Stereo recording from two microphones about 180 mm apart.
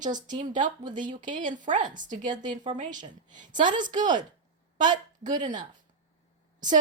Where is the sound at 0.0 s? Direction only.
45° right (ahead or behind).